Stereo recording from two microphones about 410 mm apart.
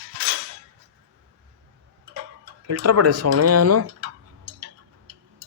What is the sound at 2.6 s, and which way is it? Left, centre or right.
Speech, right.